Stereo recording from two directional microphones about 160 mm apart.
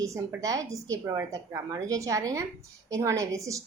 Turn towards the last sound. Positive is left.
turn(degrees=-20)  # may be behind; listen again after turning